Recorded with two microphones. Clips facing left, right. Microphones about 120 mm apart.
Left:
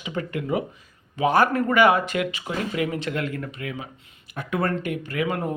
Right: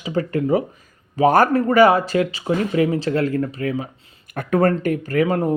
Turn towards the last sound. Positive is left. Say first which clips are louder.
# right 7 dB
turn(degrees=-35)  # may be behind; listen again after turning